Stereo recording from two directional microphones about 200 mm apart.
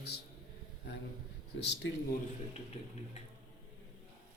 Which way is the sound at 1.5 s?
65° left (ahead or behind).